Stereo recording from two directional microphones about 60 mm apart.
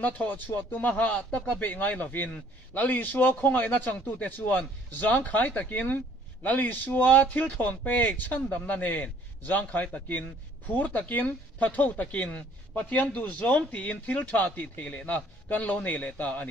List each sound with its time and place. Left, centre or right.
0.0 s speech: left